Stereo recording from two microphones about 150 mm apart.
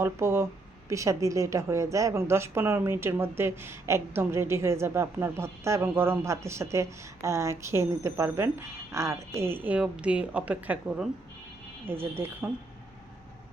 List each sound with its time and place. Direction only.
0.0 s a woman's voice: 20° right (ahead or behind)